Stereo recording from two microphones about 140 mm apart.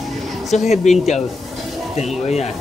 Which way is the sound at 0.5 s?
55° left (ahead or behind).